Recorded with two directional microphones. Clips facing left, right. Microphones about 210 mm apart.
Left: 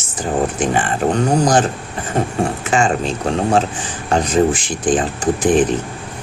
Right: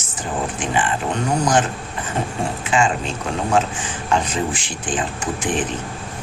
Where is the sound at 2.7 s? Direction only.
40° left (ahead or behind).